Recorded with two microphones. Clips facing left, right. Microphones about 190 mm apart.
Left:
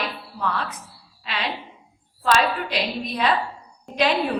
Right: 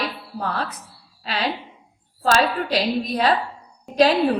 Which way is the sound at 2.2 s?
40° right (ahead or behind).